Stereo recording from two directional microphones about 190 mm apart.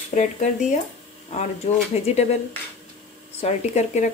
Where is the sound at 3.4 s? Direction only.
35° left (ahead or behind).